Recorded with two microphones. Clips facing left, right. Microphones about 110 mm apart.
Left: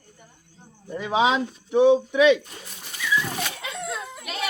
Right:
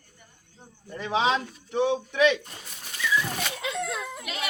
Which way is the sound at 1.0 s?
10° left (ahead or behind).